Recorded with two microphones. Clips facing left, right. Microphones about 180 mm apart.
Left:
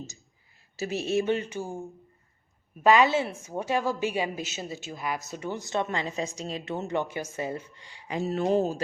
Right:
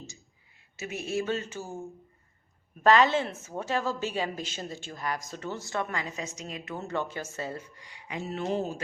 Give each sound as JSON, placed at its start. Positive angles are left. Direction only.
{"t": 0.8, "sound": "a woman's voice", "side_deg": 30}
{"t": 7.8, "sound": "speech", "side_deg": 30}